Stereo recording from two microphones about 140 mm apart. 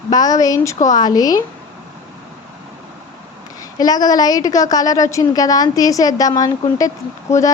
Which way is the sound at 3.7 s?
25° left (ahead or behind).